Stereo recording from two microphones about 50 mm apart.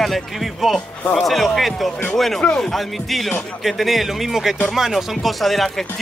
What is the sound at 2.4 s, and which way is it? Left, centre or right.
Speech, centre.